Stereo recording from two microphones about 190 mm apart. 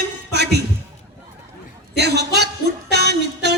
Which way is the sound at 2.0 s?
60° right (ahead or behind).